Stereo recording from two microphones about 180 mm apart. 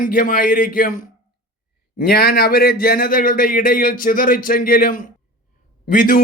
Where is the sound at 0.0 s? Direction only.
50° left (ahead or behind).